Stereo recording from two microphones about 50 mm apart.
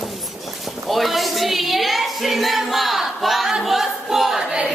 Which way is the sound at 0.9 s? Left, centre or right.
Centre.